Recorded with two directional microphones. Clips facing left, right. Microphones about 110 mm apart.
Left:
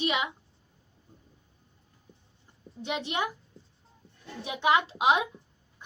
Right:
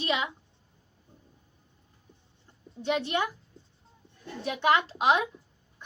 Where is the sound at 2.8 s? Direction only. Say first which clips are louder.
Right 3 dB; 15° left (ahead or behind).